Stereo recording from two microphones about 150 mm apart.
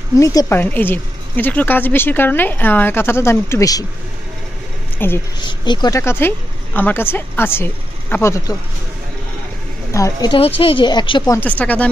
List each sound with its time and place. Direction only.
0.2 s a woman's voice: 25° left (ahead or behind)
4.9 s speech: 15° left (ahead or behind)
5.4 s a woman's voice: 30° left (ahead or behind)
9.9 s speech: 20° left (ahead or behind)
10.3 s speech: 35° left (ahead or behind)
11.3 s a woman's voice: 10° left (ahead or behind)